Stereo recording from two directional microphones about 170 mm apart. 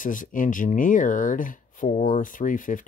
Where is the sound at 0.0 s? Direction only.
50° left (ahead or behind).